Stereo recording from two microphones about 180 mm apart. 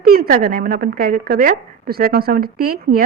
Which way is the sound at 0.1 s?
55° right (ahead or behind).